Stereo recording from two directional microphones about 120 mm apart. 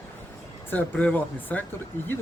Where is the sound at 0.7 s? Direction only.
10° left (ahead or behind).